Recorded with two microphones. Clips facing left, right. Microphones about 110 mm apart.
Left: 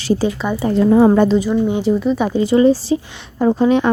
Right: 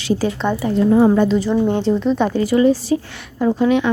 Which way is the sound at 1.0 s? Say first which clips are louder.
Left 2 dB; 60° left (ahead or behind).